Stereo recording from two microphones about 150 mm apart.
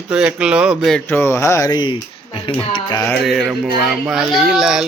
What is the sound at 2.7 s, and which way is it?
Music, 30° left (ahead or behind).